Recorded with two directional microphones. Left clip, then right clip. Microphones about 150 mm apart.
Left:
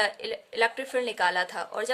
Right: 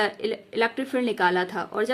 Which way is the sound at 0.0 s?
30° left (ahead or behind).